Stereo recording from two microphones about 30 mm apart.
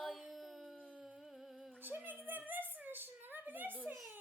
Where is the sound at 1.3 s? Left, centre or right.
Centre.